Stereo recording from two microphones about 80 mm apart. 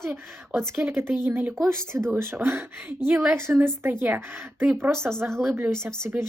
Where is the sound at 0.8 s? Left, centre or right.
Right.